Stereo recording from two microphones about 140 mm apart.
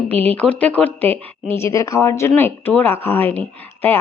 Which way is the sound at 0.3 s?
10° left (ahead or behind).